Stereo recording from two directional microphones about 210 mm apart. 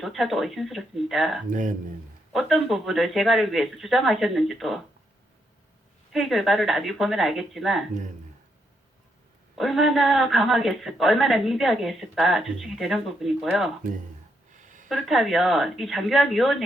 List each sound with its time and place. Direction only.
0.0 s a woman's voice: centre (ahead or behind)
1.5 s speech: 40° right (ahead or behind)
2.3 s a woman's voice: centre (ahead or behind)
6.1 s a woman's voice: centre (ahead or behind)
9.6 s a woman's voice: centre (ahead or behind)
14.8 s a woman's voice: centre (ahead or behind)